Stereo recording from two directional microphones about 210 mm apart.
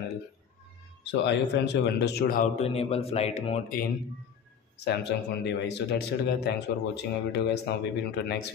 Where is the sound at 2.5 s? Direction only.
30° left (ahead or behind).